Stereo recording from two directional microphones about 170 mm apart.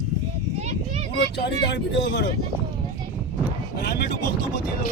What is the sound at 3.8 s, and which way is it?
Vehicle, 80° left.